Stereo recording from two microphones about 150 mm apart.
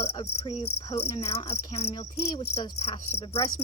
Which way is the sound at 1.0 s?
45° left (ahead or behind).